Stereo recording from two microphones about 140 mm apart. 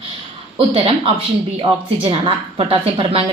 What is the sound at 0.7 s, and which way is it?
A woman's voice, 40° right (ahead or behind).